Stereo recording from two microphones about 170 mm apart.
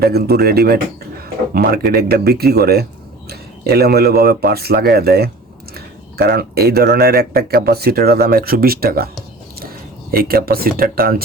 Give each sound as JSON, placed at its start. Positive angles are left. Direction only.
{"t": 0.0, "sound": "speech", "side_deg": -65}
{"t": 10.1, "sound": "speech", "side_deg": -60}